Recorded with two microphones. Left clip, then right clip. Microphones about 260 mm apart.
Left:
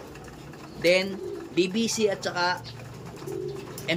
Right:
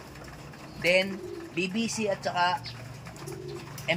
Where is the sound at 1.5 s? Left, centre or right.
Left.